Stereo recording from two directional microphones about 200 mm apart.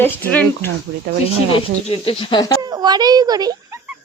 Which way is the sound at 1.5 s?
30° left (ahead or behind).